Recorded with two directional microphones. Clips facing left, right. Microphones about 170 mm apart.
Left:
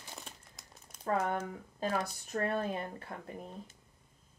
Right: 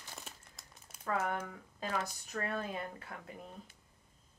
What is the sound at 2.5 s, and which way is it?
Speech, 25° left (ahead or behind).